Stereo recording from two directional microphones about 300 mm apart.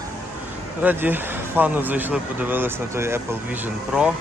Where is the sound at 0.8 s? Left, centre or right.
Centre.